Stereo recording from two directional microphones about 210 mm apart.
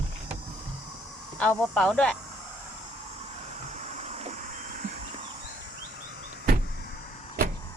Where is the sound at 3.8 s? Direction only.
30° right (ahead or behind).